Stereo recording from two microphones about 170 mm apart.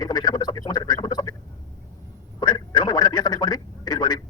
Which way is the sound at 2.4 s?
25° left (ahead or behind).